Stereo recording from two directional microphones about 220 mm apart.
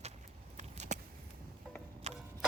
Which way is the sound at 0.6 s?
30° right (ahead or behind).